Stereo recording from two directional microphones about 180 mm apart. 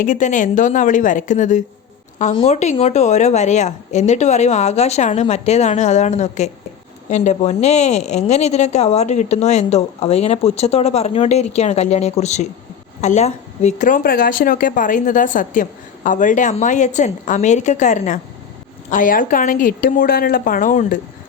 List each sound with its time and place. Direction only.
0.0 s speech: 45° left (ahead or behind)